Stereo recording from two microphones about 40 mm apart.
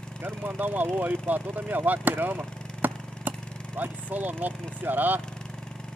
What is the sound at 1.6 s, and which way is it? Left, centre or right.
Vehicle, right.